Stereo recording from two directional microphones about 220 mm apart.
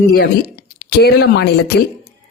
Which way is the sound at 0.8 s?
45° left (ahead or behind).